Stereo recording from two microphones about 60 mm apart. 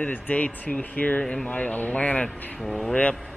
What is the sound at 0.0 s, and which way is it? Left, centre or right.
Speech, left.